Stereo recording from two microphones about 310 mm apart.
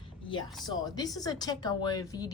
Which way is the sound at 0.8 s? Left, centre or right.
Centre.